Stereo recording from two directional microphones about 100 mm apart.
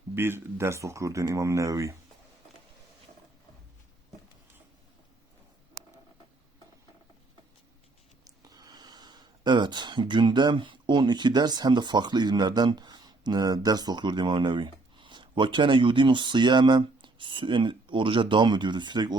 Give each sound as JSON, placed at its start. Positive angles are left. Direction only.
{"t": 0.1, "sound": "speech", "side_deg": -25}
{"t": 8.2, "sound": "speech", "side_deg": -40}